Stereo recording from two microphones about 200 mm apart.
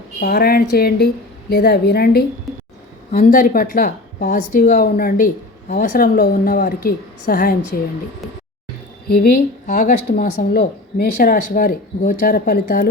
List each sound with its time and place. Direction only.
0.2 s a woman's voice: 50° left (ahead or behind)
9.0 s a woman's voice: 50° left (ahead or behind)